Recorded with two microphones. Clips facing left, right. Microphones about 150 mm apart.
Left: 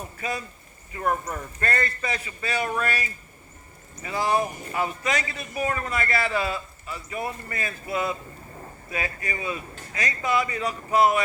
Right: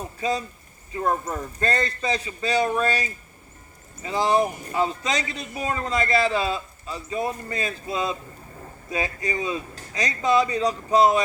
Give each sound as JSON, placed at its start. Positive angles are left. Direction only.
{"t": 0.2, "sound": "a man's voice", "side_deg": -20}